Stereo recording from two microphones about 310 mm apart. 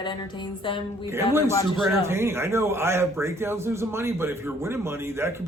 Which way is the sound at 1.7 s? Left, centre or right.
Centre.